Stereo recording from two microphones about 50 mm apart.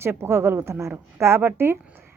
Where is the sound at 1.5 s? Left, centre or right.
Right.